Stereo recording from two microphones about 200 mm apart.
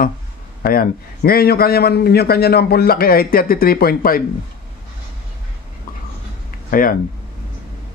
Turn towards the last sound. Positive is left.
turn(degrees=45)  # may be behind; listen again after turning